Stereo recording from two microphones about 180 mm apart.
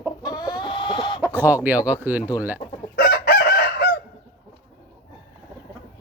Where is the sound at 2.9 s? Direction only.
60° left (ahead or behind).